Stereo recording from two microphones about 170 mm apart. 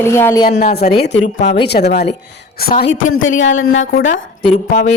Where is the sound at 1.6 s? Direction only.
75° left (ahead or behind).